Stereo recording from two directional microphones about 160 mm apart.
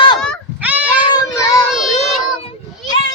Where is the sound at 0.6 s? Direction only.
10° right (ahead or behind).